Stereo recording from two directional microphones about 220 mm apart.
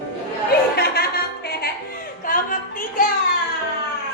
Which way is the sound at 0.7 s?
45° left (ahead or behind).